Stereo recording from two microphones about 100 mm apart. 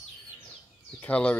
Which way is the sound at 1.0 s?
15° left (ahead or behind).